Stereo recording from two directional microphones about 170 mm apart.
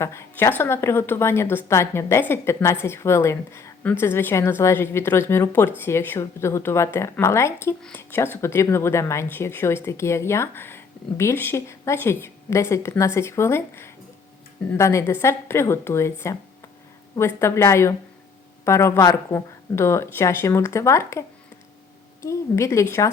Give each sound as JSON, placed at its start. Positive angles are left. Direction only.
{"t": 0.0, "sound": "a woman's voice", "side_deg": 15}
{"t": 7.8, "sound": "speech", "side_deg": 5}
{"t": 8.1, "sound": "a woman's voice", "side_deg": 15}